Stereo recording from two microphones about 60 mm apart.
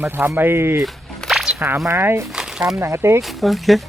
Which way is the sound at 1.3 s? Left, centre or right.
Centre.